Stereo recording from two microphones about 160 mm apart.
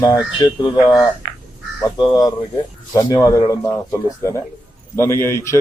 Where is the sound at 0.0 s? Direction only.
20° left (ahead or behind).